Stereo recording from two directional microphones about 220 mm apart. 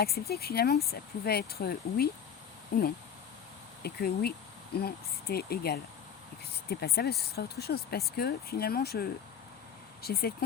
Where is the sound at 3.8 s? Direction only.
45° left (ahead or behind).